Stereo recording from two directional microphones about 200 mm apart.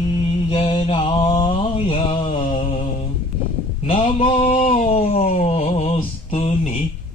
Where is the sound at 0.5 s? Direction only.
25° left (ahead or behind).